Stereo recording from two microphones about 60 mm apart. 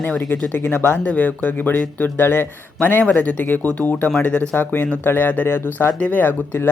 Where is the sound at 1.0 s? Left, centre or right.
Left.